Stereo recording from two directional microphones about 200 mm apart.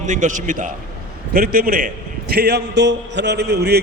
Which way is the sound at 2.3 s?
55° right (ahead or behind).